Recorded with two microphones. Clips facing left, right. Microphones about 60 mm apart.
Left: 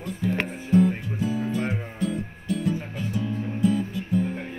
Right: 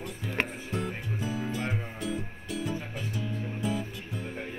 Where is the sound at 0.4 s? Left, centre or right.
Centre.